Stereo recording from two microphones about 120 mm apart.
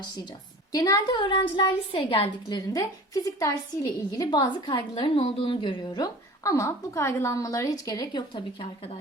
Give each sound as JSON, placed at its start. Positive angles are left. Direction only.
{"t": 0.7, "sound": "a woman's voice", "side_deg": 30}
{"t": 1.1, "sound": "a woman's voice", "side_deg": 45}
{"t": 2.5, "sound": "a woman's voice", "side_deg": 30}